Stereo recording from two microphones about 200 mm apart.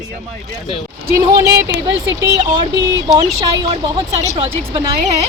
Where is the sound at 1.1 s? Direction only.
55° right (ahead or behind).